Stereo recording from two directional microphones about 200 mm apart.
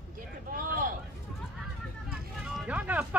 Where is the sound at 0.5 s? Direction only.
45° right (ahead or behind).